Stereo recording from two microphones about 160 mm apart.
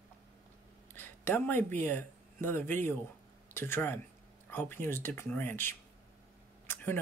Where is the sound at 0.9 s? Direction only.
15° left (ahead or behind).